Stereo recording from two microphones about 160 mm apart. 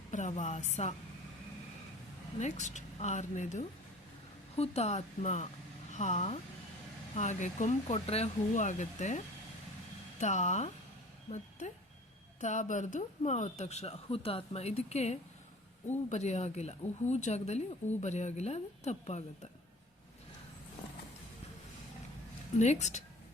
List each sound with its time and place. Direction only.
0.1 s speech: 50° left (ahead or behind)
2.4 s speech: 45° left (ahead or behind)
12.4 s speech: 50° left (ahead or behind)
22.5 s speech: 45° left (ahead or behind)